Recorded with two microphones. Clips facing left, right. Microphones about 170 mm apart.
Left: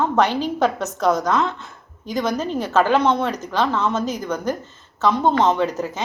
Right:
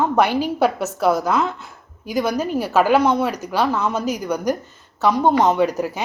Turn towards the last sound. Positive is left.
turn(degrees=-10)  # may be behind; listen again after turning